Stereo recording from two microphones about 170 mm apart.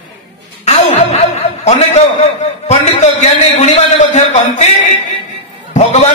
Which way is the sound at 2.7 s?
40° left (ahead or behind).